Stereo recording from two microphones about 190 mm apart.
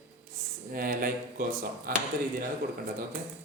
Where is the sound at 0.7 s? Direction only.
45° right (ahead or behind).